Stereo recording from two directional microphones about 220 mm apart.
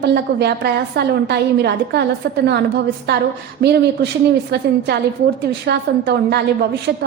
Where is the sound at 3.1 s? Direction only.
50° right (ahead or behind).